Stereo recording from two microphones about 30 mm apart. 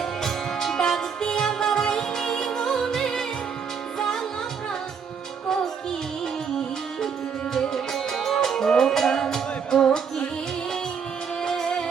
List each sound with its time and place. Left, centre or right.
0.0 s music: centre
7.7 s music: centre
11.4 s music: centre